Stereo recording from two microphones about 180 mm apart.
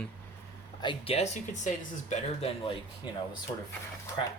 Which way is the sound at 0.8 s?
30° left (ahead or behind).